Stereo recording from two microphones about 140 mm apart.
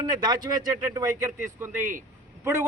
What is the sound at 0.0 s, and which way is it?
A man's voice, 30° right (ahead or behind).